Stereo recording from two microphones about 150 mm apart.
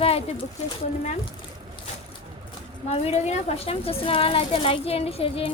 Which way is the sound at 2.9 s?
50° left (ahead or behind).